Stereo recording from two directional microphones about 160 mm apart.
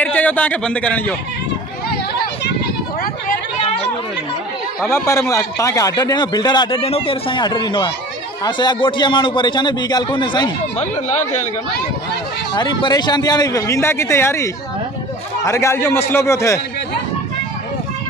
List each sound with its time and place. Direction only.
0.0 s a man's voice: 10° left (ahead or behind)
4.8 s a man's voice: 15° left (ahead or behind)
10.8 s speech: 45° left (ahead or behind)
12.5 s a man's voice: 25° left (ahead or behind)